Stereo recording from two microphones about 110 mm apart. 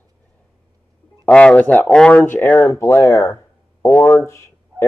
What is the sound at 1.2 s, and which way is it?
Speech, 10° left (ahead or behind).